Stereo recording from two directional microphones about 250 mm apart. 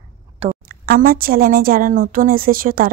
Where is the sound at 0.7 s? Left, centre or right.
Right.